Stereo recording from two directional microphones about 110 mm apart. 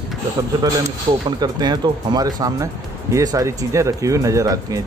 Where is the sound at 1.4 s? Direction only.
40° right (ahead or behind).